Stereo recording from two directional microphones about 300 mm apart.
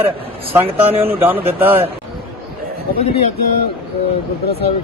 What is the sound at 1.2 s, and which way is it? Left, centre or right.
Speech, centre.